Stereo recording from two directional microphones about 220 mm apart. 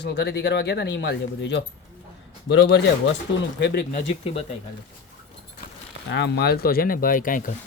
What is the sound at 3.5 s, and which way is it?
Speech, 45° left (ahead or behind).